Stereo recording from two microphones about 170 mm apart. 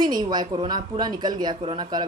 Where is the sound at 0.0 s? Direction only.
25° right (ahead or behind).